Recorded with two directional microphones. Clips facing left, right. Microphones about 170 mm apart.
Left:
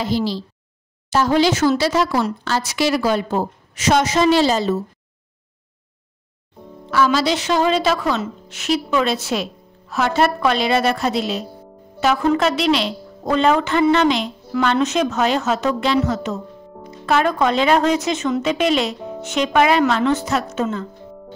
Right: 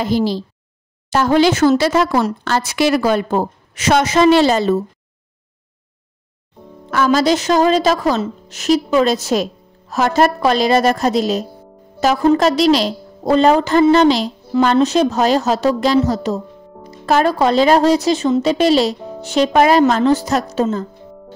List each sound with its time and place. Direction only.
0.0 s speech: 50° right (ahead or behind)
6.9 s a woman's voice: 45° right (ahead or behind)
16.7 s music: 5° left (ahead or behind)
17.0 s a woman's voice: 35° right (ahead or behind)
18.9 s music: centre (ahead or behind)
19.2 s a woman's voice: 35° right (ahead or behind)